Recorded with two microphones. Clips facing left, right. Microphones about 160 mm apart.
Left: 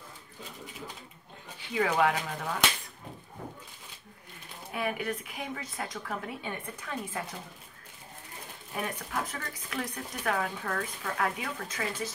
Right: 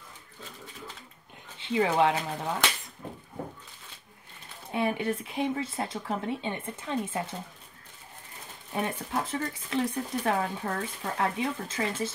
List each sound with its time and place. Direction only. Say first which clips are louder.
1.6 s speech: right 3 dB; 25° right (ahead or behind)
4.7 s speech: right 4 dB; 30° right (ahead or behind)
8.7 s speech: right 4 dB; 30° right (ahead or behind)